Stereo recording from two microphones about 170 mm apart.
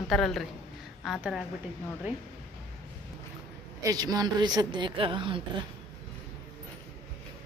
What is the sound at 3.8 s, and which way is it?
A woman's voice, 20° right (ahead or behind).